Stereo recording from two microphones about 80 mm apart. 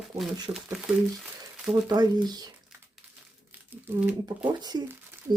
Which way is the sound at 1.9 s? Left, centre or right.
Right.